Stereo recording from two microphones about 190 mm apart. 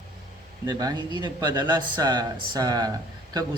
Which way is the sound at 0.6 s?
20° right (ahead or behind).